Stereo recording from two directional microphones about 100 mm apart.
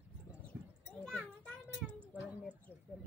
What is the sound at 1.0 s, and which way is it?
Children playing, 10° left (ahead or behind).